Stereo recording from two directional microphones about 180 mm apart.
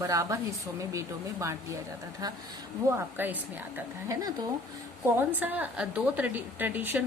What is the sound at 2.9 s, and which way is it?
A woman's voice, 15° right (ahead or behind).